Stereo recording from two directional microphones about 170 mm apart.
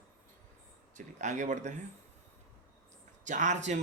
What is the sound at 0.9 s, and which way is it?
Speech, 45° right (ahead or behind).